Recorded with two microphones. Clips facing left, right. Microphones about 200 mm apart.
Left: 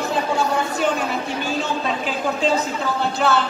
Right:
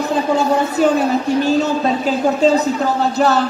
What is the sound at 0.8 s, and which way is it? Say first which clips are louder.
A woman's voice: right 7 dB; 40° right (ahead or behind).